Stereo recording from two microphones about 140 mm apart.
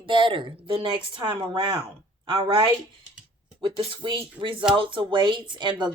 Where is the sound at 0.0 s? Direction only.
40° right (ahead or behind).